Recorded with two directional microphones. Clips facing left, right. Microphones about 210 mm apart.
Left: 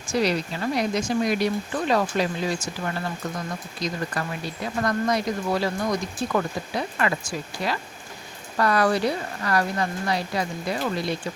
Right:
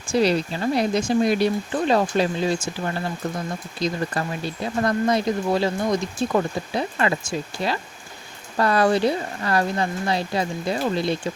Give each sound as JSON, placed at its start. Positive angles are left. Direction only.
{"t": 0.1, "sound": "speech", "side_deg": -30}